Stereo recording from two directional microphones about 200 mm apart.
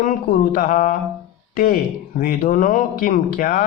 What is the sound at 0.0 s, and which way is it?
Speech, 45° left (ahead or behind).